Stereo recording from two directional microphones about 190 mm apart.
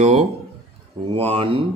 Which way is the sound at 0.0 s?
35° right (ahead or behind).